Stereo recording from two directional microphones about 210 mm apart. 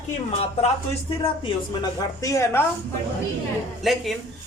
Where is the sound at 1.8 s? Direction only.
15° left (ahead or behind).